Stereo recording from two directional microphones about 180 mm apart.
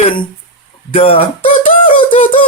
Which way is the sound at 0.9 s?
35° left (ahead or behind).